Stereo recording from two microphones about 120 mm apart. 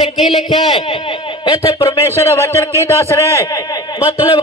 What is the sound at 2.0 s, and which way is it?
A man's voice, 25° left (ahead or behind).